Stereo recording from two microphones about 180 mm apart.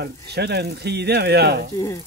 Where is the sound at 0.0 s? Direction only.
65° right (ahead or behind).